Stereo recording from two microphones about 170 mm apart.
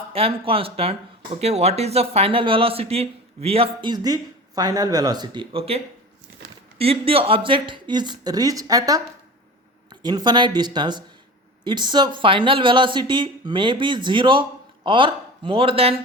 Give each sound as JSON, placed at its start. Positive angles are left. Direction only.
{"t": 0.1, "sound": "speech", "side_deg": -35}